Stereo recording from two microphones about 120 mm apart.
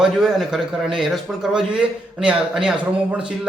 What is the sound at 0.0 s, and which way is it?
A man's voice, centre (ahead or behind).